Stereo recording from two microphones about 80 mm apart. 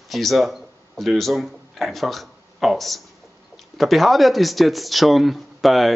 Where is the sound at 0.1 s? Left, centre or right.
Centre.